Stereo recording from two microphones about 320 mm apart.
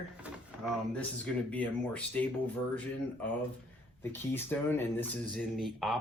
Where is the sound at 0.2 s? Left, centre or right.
Centre.